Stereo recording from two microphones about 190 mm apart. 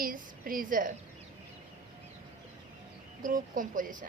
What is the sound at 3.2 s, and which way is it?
Speech, 45° right (ahead or behind).